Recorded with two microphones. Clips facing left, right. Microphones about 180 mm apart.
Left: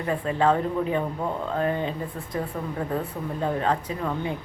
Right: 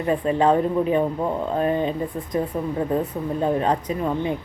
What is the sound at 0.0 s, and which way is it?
Speech, 20° right (ahead or behind).